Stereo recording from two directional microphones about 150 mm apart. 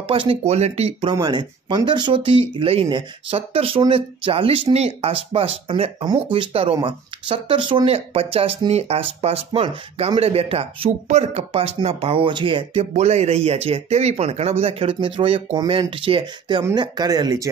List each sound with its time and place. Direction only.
0.0 s speech: 40° right (ahead or behind)
1.1 s speech: 30° right (ahead or behind)